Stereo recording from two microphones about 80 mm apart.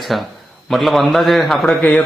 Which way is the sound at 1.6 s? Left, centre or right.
Left.